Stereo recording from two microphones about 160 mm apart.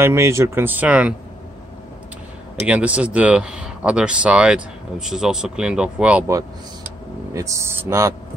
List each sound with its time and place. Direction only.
0.0 s speech: 15° right (ahead or behind)
2.6 s speech: 10° right (ahead or behind)
7.3 s speech: 20° right (ahead or behind)